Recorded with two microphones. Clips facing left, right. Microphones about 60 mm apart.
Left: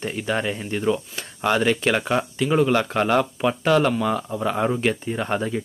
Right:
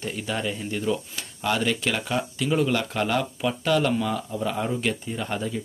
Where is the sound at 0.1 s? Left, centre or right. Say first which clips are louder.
Left 4 dB; left.